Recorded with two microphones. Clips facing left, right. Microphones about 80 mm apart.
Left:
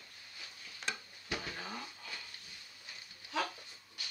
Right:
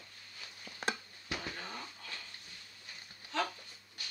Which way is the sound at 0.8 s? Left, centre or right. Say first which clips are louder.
Right 5 dB; right.